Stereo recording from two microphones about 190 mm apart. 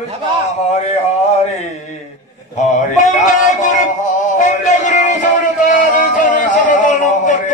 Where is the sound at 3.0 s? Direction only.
40° left (ahead or behind).